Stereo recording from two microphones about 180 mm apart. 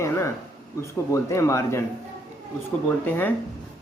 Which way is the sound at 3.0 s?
10° left (ahead or behind).